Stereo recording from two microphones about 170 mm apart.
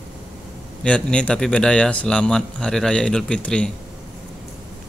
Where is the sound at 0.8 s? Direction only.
5° left (ahead or behind).